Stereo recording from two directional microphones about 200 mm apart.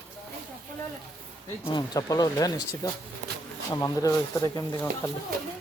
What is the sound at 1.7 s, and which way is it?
Speech, 20° left (ahead or behind).